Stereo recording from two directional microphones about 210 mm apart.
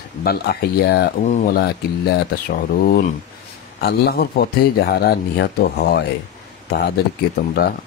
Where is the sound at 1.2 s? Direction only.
40° left (ahead or behind).